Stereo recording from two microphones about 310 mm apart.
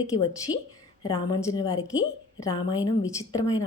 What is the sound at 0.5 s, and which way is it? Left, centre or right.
Speech, centre.